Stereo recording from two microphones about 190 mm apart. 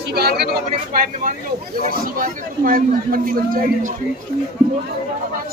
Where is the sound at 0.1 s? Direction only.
55° right (ahead or behind).